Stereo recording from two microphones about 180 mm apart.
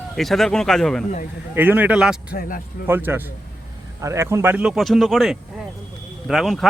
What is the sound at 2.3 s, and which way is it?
Speech, 55° left (ahead or behind).